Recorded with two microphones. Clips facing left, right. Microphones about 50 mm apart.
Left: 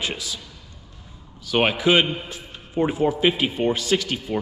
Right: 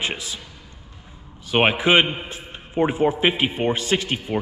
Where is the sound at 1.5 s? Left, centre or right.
Right.